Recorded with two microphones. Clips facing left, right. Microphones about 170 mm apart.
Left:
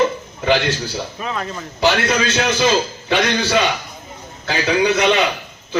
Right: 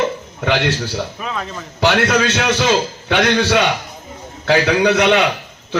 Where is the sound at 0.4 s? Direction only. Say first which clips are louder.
Even; 65° right (ahead or behind).